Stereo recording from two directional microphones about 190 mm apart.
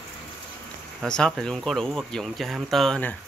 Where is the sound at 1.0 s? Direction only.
5° left (ahead or behind).